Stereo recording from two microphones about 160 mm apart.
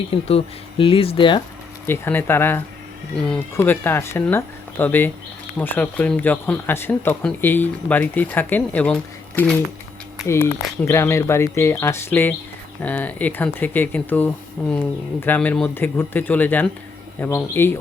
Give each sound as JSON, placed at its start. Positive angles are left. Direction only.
{"t": 0.1, "sound": "speech", "side_deg": 35}
{"t": 1.9, "sound": "speech", "side_deg": 15}